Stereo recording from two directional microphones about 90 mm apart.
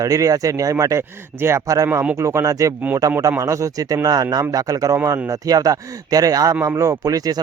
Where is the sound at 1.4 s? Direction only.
30° right (ahead or behind).